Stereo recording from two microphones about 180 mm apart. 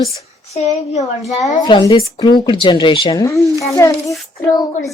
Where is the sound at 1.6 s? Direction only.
25° left (ahead or behind).